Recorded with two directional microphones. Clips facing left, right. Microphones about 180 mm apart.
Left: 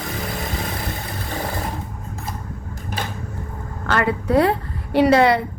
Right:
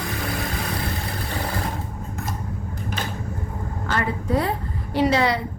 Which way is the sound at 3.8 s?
70° left (ahead or behind).